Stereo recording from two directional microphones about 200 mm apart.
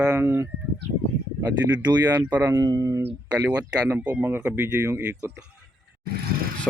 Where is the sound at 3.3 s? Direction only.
5° right (ahead or behind).